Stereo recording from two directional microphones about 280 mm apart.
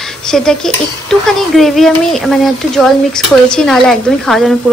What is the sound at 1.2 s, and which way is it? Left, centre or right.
Speech, centre.